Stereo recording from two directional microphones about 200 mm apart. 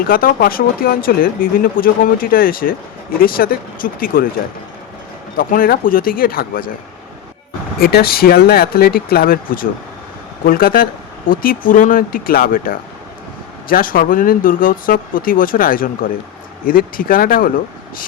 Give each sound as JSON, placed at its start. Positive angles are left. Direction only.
{"t": 0.0, "sound": "speech", "side_deg": 45}
{"t": 5.4, "sound": "speech", "side_deg": 45}
{"t": 7.8, "sound": "speech", "side_deg": 50}